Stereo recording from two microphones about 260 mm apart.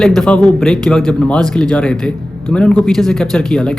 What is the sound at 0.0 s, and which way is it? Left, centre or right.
A man's voice, centre.